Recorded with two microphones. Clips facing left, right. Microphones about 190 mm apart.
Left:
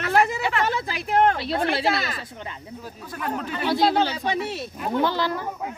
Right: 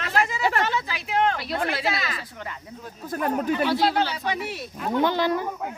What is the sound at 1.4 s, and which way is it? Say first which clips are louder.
Speech: left 3 dB; 30° left (ahead or behind).